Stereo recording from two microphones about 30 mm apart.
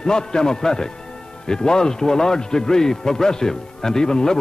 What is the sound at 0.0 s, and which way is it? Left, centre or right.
A man's voice, left.